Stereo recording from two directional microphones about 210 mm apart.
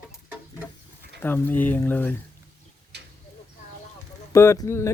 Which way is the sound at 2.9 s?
50° right (ahead or behind).